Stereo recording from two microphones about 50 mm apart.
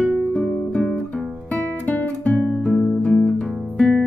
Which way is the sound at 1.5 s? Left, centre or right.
Left.